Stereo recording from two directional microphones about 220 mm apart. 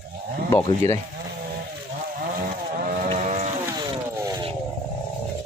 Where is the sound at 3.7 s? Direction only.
15° right (ahead or behind).